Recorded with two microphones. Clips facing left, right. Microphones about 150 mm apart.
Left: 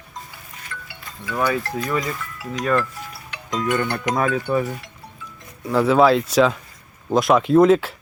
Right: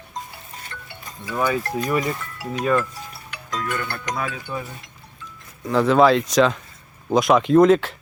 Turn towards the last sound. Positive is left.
turn(degrees=5)  # may be behind; listen again after turning